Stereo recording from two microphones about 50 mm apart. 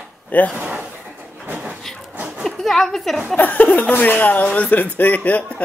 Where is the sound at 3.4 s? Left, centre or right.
Left.